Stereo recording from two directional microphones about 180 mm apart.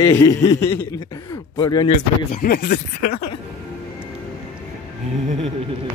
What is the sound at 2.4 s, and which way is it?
Speech, 50° left (ahead or behind).